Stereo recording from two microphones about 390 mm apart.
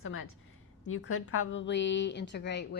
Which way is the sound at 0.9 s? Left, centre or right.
Left.